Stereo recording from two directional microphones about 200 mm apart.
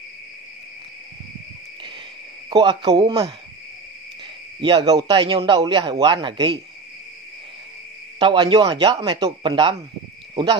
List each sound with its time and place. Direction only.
2.5 s a man's voice: 20° right (ahead or behind)
4.6 s a man's voice: 25° right (ahead or behind)
8.2 s a man's voice: 25° right (ahead or behind)